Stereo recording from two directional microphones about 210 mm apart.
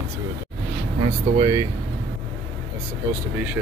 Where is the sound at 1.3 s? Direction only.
20° right (ahead or behind).